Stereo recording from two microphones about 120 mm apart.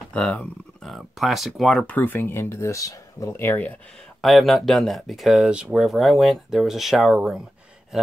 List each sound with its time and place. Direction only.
0.1 s speech: 10° left (ahead or behind)
2.0 s speech: 15° left (ahead or behind)
4.2 s speech: centre (ahead or behind)
7.9 s a sound: 5° right (ahead or behind)